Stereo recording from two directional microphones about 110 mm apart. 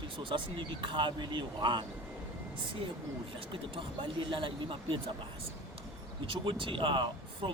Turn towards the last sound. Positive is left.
turn(degrees=-50)  # may be behind; listen again after turning